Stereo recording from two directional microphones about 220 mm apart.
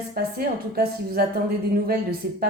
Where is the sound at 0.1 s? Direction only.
45° right (ahead or behind).